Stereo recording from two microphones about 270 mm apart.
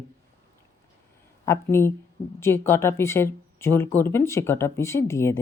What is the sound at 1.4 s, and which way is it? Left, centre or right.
Speech, centre.